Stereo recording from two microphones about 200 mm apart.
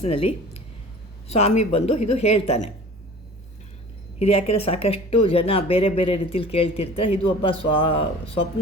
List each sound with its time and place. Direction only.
0.0 s a woman's voice: 30° left (ahead or behind)
4.2 s speech: 30° left (ahead or behind)